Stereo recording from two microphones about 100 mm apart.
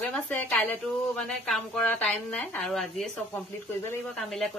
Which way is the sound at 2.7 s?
Centre (ahead or behind).